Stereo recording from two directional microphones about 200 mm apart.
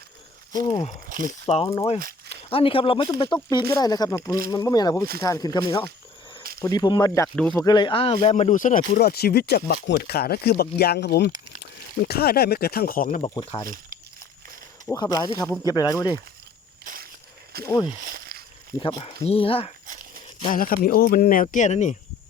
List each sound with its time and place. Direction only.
0.5 s speech: 20° left (ahead or behind)
1.1 s speech: 40° right (ahead or behind)
1.5 s speech: 30° left (ahead or behind)
2.0 s walk: 45° right (ahead or behind)
2.3 s speech: 25° left (ahead or behind)
9.0 s speech: 50° left (ahead or behind)
14.8 s speech: 15° left (ahead or behind)
16.8 s crushing: 45° right (ahead or behind)
17.7 s speech: 15° left (ahead or behind)
18.1 s a sound: 50° right (ahead or behind)
18.8 s speech: 25° left (ahead or behind)
20.5 s speech: 45° left (ahead or behind)